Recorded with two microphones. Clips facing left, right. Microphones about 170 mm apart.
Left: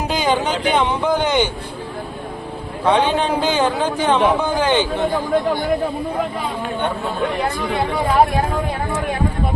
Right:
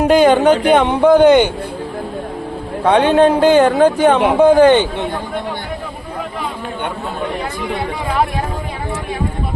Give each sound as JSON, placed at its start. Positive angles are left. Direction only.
{"t": 0.0, "sound": "speech", "side_deg": -60}
{"t": 2.8, "sound": "speech", "side_deg": -60}